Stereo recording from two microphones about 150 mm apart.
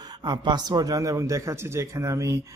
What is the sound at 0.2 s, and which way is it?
Speech, 30° right (ahead or behind).